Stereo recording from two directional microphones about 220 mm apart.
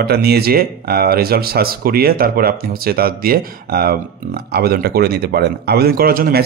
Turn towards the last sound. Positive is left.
turn(degrees=-40)  # may be behind; listen again after turning